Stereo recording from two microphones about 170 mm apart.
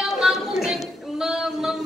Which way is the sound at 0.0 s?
Centre (ahead or behind).